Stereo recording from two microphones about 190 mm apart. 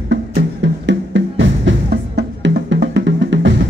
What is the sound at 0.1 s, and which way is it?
Music, 70° right (ahead or behind).